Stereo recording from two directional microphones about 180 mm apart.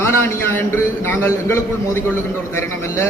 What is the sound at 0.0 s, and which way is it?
Speech, 15° left (ahead or behind).